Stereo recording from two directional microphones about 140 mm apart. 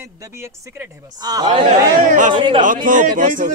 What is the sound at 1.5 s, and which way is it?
Speech, 50° right (ahead or behind).